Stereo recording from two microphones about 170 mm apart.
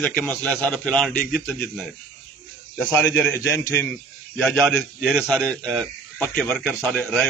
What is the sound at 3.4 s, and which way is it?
Speech, 15° left (ahead or behind).